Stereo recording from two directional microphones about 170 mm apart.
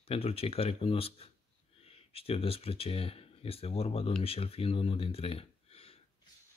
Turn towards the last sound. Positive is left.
turn(degrees=35)  # may be behind; listen again after turning